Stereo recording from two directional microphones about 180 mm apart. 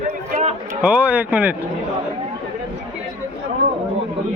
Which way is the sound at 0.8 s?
5° right (ahead or behind).